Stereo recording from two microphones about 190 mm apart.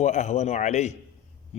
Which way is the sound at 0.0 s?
35° left (ahead or behind).